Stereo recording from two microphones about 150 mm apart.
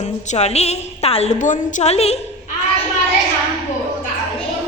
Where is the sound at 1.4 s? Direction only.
60° left (ahead or behind).